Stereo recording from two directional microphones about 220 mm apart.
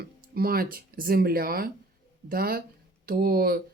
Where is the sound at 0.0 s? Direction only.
45° right (ahead or behind).